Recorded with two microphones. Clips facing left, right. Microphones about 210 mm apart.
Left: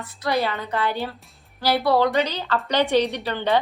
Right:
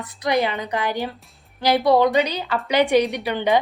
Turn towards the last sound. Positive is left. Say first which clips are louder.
# right 2 dB
turn(degrees=-15)  # may be behind; listen again after turning